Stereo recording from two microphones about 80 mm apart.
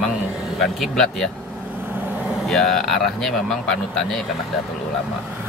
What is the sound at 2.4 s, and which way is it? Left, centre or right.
Speech, centre.